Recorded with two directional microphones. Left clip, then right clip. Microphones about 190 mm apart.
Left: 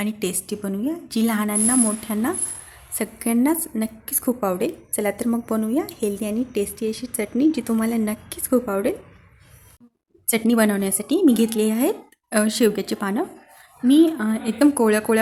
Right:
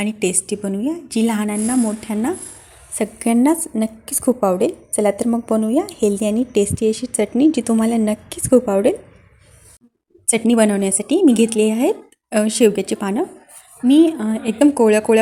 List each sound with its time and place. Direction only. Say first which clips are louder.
0.0 s a woman's voice: right 6 dB; 15° right (ahead or behind)
10.2 s a woman's voice: right 4 dB; 15° right (ahead or behind)